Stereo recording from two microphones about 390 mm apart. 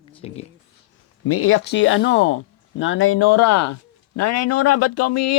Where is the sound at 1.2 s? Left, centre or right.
Left.